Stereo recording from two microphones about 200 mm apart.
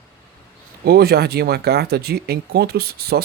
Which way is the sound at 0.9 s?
50° right (ahead or behind).